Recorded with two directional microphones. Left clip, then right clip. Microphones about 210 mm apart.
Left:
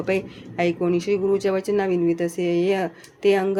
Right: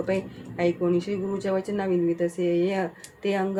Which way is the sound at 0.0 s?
45° left (ahead or behind).